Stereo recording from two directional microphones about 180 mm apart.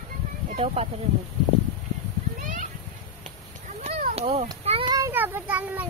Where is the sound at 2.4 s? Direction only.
45° right (ahead or behind).